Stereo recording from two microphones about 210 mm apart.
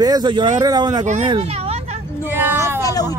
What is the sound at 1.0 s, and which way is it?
Speech, 35° right (ahead or behind).